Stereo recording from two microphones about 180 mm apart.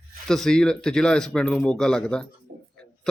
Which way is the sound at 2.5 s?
75° right (ahead or behind).